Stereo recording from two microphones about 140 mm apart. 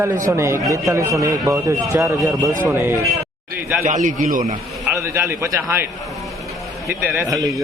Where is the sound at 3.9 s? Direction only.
65° right (ahead or behind).